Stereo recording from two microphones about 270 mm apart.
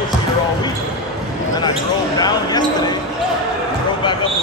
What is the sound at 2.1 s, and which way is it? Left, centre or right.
Basketball bounce, centre.